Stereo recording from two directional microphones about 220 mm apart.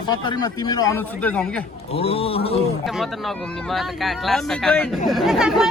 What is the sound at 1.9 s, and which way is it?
Speech, 25° left (ahead or behind).